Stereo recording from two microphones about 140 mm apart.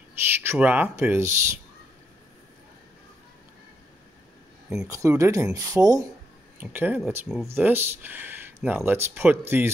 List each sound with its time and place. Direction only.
0.3 s speech: 15° right (ahead or behind)
4.8 s speech: 20° right (ahead or behind)
6.6 s speech: 15° right (ahead or behind)